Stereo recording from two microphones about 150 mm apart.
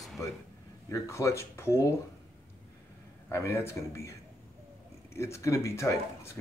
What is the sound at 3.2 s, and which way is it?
A man's voice, 15° left (ahead or behind).